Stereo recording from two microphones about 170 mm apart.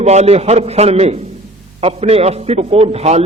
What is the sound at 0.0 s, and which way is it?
A man's voice, 40° right (ahead or behind).